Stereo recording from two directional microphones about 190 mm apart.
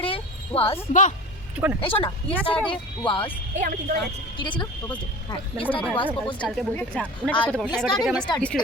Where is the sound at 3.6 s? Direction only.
45° right (ahead or behind).